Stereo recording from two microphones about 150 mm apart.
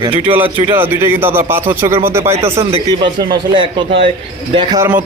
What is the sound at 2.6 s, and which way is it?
Speech, 35° right (ahead or behind).